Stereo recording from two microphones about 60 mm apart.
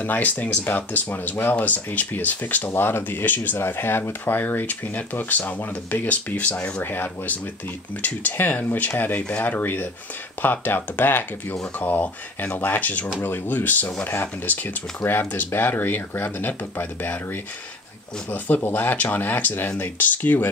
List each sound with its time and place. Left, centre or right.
0.0 s speech: left
6.8 s speech: left